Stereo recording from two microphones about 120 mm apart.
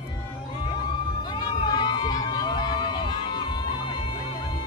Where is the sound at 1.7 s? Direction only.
40° left (ahead or behind).